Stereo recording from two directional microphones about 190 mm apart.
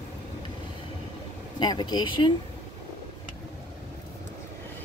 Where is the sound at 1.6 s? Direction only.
25° left (ahead or behind).